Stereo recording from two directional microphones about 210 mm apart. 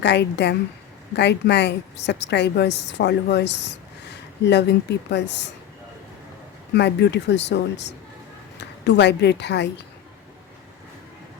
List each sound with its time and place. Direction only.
0.0 s a woman's voice: 55° left (ahead or behind)
6.7 s a woman's voice: 55° left (ahead or behind)